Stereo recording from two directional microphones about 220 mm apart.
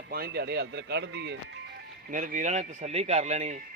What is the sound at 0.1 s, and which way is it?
Speech, 45° right (ahead or behind).